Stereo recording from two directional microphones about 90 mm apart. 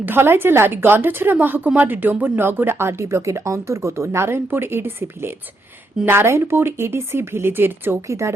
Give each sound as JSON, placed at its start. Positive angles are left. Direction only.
{"t": 0.0, "sound": "a woman's voice", "side_deg": -25}